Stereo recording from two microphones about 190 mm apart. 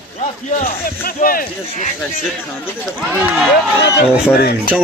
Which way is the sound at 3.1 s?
Centre (ahead or behind).